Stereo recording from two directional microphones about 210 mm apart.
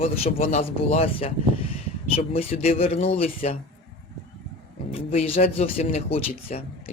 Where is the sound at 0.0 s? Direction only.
30° left (ahead or behind).